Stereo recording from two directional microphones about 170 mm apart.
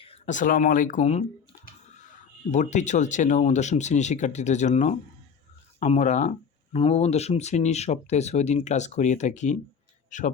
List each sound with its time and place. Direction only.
0.0 s speech: 40° left (ahead or behind)
2.5 s speech: 45° left (ahead or behind)